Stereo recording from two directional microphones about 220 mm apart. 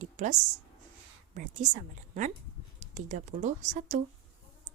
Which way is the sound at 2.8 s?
35° right (ahead or behind).